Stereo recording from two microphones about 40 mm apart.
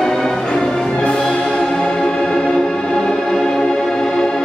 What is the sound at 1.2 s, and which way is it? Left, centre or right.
Music, centre.